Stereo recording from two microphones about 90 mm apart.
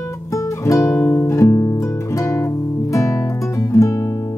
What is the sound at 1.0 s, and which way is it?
Music, 25° left (ahead or behind).